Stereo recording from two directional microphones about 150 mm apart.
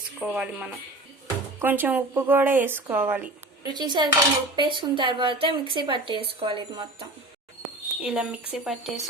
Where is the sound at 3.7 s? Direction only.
30° right (ahead or behind).